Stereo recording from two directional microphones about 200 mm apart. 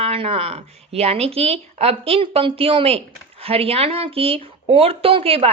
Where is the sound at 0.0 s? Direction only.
30° right (ahead or behind).